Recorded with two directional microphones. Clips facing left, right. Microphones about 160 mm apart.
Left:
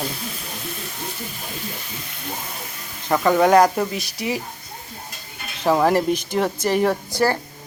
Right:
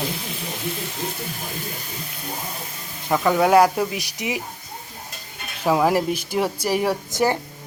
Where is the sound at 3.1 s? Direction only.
5° right (ahead or behind).